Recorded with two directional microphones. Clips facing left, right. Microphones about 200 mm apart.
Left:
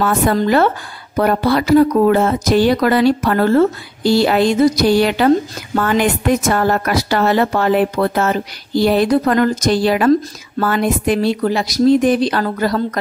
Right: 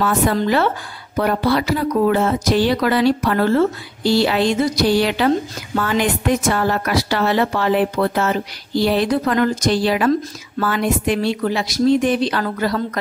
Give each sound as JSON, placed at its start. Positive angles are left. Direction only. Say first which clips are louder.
{"t": 0.0, "sound": "speech", "louder": "left 2 dB", "side_deg": 50}